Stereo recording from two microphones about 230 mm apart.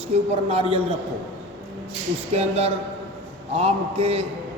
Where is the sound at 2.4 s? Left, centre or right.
Right.